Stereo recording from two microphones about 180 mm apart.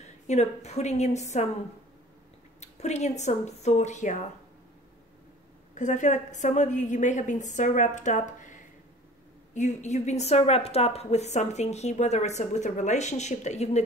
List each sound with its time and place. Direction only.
0.3 s a woman's voice: 40° left (ahead or behind)
2.6 s a woman's voice: 40° left (ahead or behind)
5.8 s a woman's voice: 45° left (ahead or behind)